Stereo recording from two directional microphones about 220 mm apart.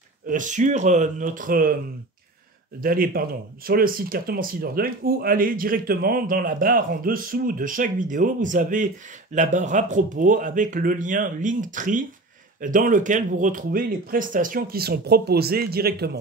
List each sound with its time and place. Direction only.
0.3 s speech: 35° right (ahead or behind)
2.8 s speech: 40° right (ahead or behind)